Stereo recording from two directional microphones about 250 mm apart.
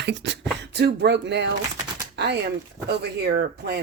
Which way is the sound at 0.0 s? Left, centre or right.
Right.